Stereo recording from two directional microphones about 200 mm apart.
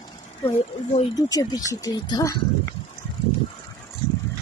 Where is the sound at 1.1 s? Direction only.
20° left (ahead or behind).